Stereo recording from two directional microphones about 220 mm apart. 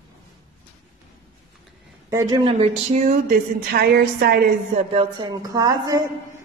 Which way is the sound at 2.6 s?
35° right (ahead or behind).